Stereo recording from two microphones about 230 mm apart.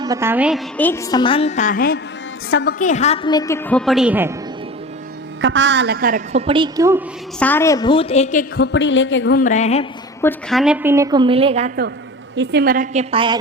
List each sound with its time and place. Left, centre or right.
0.0 s a woman's voice: centre
0.8 s a woman's voice: centre; by 2.0 s left
2.5 s a woman's voice: left
2.7 s a woman's voice: left; by 4.3 s centre
5.4 s a woman's voice: right; by 7.0 s centre
7.3 s a woman's voice: centre; by 9.4 s left
9.4 s a woman's voice: left
10.2 s a woman's voice: centre
10.6 s a woman's voice: centre; by 11.7 s right
12.4 s a woman's voice: right